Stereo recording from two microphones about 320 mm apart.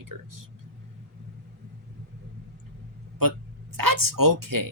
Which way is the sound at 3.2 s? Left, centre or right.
Right.